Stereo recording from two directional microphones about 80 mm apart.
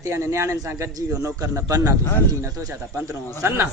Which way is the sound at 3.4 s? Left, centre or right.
Right.